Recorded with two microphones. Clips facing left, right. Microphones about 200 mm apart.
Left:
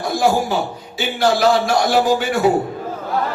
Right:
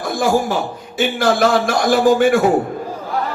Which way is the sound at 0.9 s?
50° right (ahead or behind).